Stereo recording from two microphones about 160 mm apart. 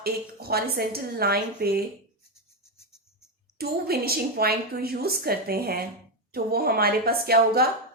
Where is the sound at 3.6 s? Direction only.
75° right (ahead or behind).